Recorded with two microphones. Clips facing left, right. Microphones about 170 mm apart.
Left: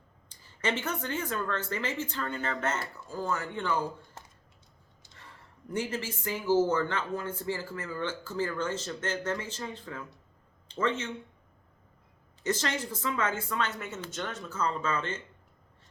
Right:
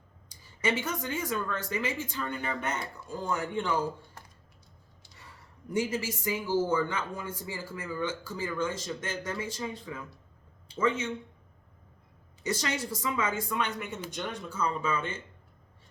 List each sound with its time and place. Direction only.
0.6 s speech: 10° right (ahead or behind)
5.7 s speech: 10° right (ahead or behind)
12.4 s speech: 10° right (ahead or behind)